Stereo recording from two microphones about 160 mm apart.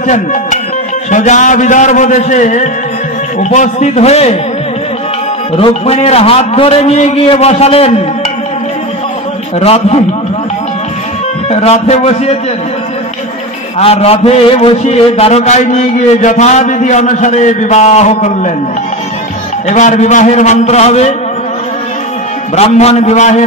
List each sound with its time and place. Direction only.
0.0 s a man's voice: 50° left (ahead or behind)
5.6 s a man's voice: 40° left (ahead or behind)
9.6 s a man's voice: 40° left (ahead or behind)
11.5 s a man's voice: 40° left (ahead or behind)
13.7 s a man's voice: 40° left (ahead or behind)
19.7 s a man's voice: 50° left (ahead or behind)
22.6 s a man's voice: 40° left (ahead or behind)